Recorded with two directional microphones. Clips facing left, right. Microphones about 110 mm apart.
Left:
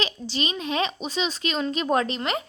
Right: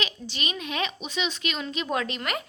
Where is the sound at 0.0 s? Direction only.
30° left (ahead or behind).